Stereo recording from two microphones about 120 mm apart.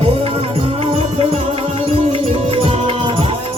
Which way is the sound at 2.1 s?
55° right (ahead or behind).